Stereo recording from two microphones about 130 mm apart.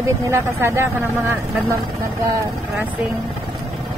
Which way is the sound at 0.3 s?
20° right (ahead or behind).